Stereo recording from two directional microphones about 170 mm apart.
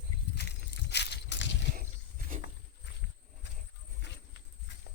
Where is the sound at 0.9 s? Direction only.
85° left.